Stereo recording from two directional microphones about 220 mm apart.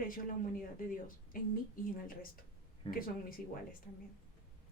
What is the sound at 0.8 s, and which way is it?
Speech, 40° left (ahead or behind).